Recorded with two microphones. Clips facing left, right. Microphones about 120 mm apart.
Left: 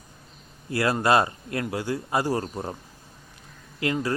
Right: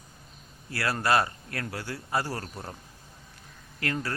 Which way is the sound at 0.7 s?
20° left (ahead or behind).